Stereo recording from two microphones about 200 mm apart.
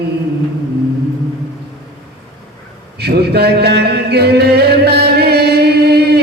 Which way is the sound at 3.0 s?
55° right (ahead or behind).